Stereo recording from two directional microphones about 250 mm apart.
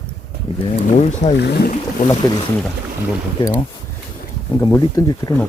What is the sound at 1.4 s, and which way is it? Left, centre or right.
Speech, left.